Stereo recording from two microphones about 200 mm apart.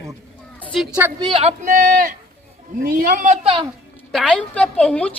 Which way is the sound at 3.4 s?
25° right (ahead or behind).